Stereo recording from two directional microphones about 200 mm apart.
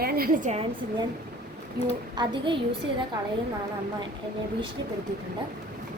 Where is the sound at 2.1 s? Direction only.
25° right (ahead or behind).